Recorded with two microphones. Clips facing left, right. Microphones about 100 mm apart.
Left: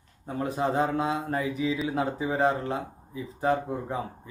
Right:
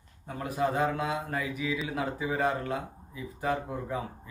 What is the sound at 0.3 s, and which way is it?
Speech, 25° left (ahead or behind).